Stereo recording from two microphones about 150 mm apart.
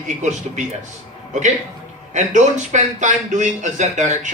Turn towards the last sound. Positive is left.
turn(degrees=-50)  # may be behind; listen again after turning